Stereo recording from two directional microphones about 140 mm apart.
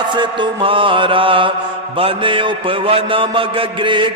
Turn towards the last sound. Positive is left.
turn(degrees=-35)  # may be behind; listen again after turning